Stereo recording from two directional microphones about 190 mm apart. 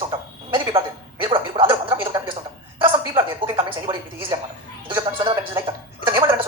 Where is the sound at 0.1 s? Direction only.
25° right (ahead or behind).